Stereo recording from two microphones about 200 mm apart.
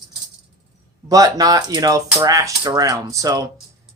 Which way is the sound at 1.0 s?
15° right (ahead or behind).